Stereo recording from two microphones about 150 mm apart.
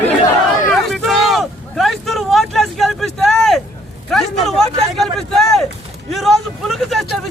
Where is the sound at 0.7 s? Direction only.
Centre (ahead or behind).